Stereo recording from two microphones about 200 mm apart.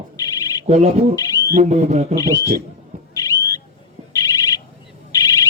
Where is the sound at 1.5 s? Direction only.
35° right (ahead or behind).